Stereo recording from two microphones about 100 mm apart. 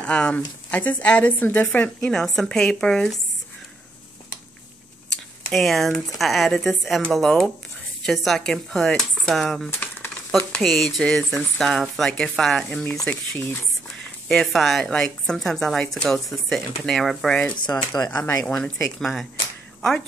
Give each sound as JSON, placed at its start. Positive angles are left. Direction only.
{"t": 0.0, "sound": "speech", "side_deg": 10}
{"t": 2.0, "sound": "speech", "side_deg": 5}
{"t": 5.5, "sound": "speech", "side_deg": 5}
{"t": 9.7, "sound": "typewriter", "side_deg": 20}
{"t": 10.3, "sound": "speech", "side_deg": 5}
{"t": 17.6, "sound": "speech", "side_deg": 40}
{"t": 18.6, "sound": "speech", "side_deg": 5}